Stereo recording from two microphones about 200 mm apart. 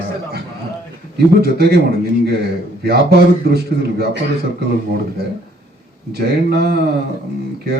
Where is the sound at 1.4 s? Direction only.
55° right (ahead or behind).